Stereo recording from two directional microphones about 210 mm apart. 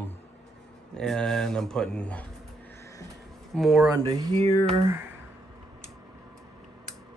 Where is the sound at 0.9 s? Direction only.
5° left (ahead or behind).